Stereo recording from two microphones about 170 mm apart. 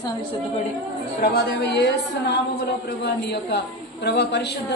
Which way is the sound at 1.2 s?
70° left (ahead or behind).